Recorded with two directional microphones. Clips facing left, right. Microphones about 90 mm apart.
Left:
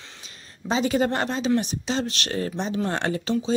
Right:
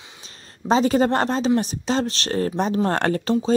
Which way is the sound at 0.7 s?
40° right (ahead or behind).